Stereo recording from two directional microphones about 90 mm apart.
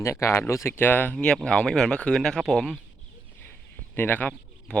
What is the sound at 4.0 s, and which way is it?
Speech, 20° left (ahead or behind).